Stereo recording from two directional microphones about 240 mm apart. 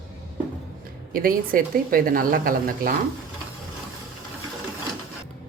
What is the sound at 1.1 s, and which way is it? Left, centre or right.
A woman's voice, right.